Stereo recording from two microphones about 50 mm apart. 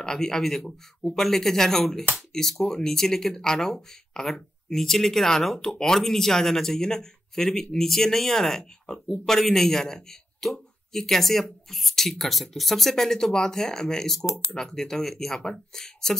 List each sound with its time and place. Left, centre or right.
0.0 s speech: centre